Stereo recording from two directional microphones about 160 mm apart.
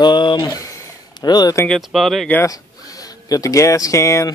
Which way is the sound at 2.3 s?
20° left (ahead or behind).